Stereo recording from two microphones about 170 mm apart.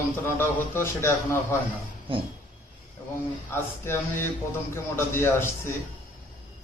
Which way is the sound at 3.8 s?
10° left (ahead or behind).